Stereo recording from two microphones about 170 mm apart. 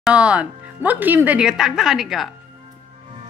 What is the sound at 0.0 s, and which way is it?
Speech, 5° right (ahead or behind).